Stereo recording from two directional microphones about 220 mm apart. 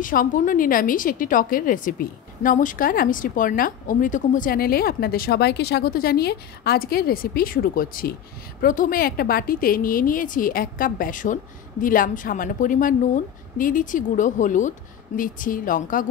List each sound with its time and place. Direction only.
0.0 s a woman's voice: 40° left (ahead or behind)